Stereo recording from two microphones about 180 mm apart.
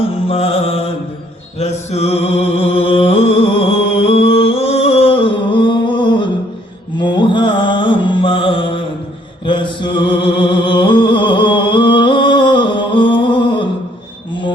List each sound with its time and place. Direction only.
0.3 s music: 35° left (ahead or behind)
9.5 s mantra: 25° left (ahead or behind)